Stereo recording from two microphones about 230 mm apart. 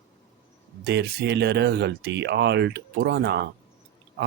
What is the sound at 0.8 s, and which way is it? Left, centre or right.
Speech, right.